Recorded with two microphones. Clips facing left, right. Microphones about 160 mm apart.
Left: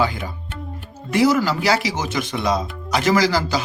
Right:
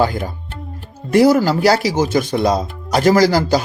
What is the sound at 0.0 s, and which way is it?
Speech, 45° right (ahead or behind).